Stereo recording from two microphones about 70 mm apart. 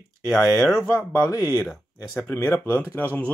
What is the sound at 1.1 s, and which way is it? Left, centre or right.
Speech, left.